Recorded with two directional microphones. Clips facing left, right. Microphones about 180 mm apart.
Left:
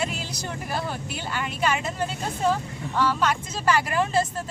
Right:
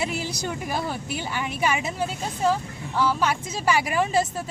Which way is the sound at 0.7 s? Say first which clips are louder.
Left 1 dB; 15° right (ahead or behind).